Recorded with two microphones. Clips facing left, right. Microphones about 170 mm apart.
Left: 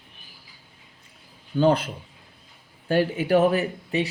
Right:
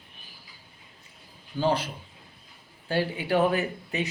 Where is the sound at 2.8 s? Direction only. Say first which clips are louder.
Left 5 dB; 45° left (ahead or behind).